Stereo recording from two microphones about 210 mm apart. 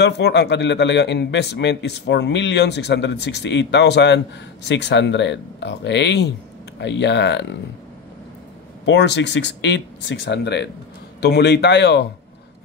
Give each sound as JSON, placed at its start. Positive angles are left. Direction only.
{"t": 0.0, "sound": "a man's voice", "side_deg": 55}
{"t": 8.8, "sound": "a man's voice", "side_deg": 55}